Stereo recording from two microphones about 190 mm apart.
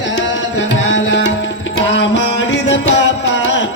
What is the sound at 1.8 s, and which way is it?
Music, 70° left (ahead or behind).